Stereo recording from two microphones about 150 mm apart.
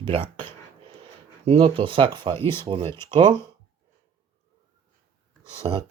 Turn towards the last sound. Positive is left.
turn(degrees=-30)  # may be behind; listen again after turning